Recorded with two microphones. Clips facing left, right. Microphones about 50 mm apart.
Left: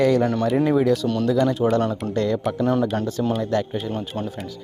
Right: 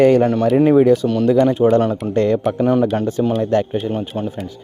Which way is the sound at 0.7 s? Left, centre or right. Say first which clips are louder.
Right 7 dB; right.